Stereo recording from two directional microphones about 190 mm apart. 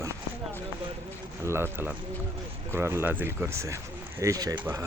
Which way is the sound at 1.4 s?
15° right (ahead or behind).